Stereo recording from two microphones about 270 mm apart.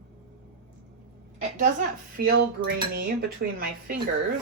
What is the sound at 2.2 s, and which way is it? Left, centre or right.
Speech, right.